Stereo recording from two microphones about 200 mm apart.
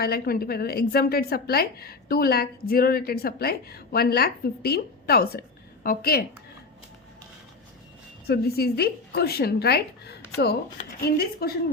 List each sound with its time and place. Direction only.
0.0 s a woman's voice: 50° left (ahead or behind)
8.3 s a woman's voice: 50° left (ahead or behind)